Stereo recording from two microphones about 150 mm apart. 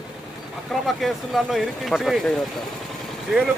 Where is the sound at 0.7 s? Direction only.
Centre (ahead or behind).